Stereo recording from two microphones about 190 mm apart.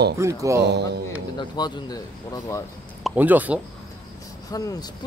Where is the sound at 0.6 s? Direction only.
60° right (ahead or behind).